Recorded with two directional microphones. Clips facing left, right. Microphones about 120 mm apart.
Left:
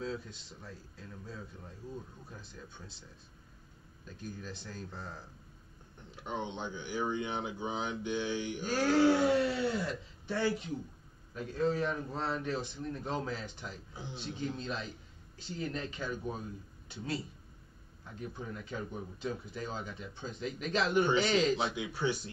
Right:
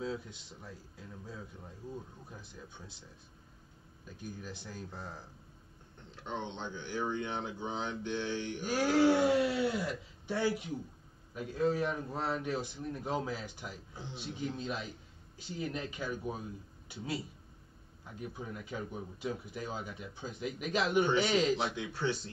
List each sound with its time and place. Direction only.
0.0 s speech: 15° right (ahead or behind)
4.0 s speech: 15° right (ahead or behind)
6.1 s speech: 10° left (ahead or behind)
8.7 s speech: 5° right (ahead or behind)
21.2 s speech: centre (ahead or behind)
21.7 s speech: 10° left (ahead or behind)